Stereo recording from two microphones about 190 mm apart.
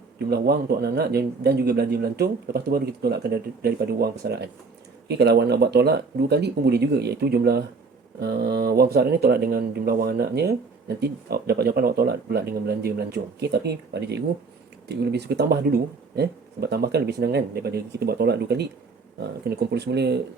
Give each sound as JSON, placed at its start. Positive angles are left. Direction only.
{"t": 0.2, "sound": "speech", "side_deg": -55}